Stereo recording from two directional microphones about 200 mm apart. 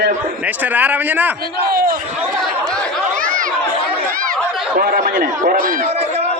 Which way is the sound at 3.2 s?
45° right (ahead or behind).